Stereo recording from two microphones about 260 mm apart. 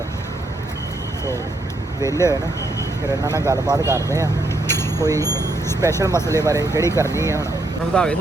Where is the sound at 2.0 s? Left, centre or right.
Centre.